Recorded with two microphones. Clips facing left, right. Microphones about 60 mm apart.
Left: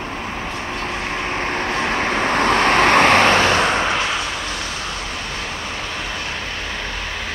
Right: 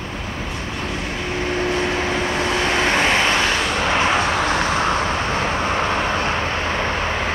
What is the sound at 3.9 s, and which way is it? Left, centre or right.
Vehicle, right.